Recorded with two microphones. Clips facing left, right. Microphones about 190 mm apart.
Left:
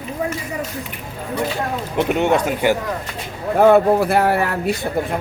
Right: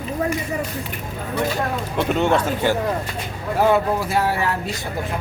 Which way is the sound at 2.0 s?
15° left (ahead or behind).